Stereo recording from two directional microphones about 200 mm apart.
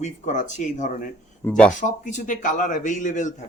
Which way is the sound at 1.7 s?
40° left (ahead or behind).